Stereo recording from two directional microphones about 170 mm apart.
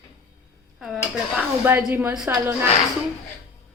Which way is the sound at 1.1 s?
10° right (ahead or behind).